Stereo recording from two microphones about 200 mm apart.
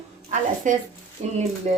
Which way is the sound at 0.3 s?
40° right (ahead or behind).